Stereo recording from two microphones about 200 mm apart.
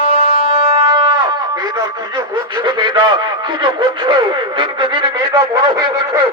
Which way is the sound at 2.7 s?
25° right (ahead or behind).